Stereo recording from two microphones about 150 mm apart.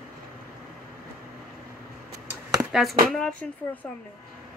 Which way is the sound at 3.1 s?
5° left (ahead or behind).